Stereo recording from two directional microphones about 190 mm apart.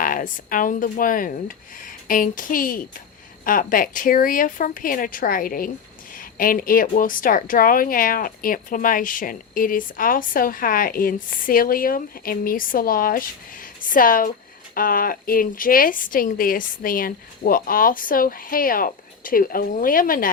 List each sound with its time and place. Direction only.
0.0 s a woman's voice: 45° left (ahead or behind)